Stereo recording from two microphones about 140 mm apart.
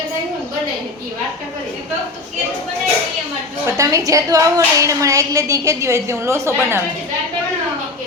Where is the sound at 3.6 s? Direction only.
20° right (ahead or behind).